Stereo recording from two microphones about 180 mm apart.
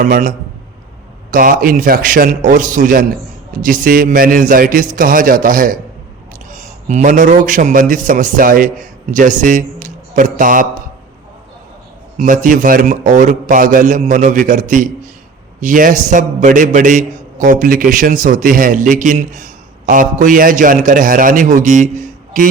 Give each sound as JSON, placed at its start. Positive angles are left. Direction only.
{"t": 0.0, "sound": "a man's voice", "side_deg": -50}
{"t": 12.1, "sound": "a man's voice", "side_deg": -45}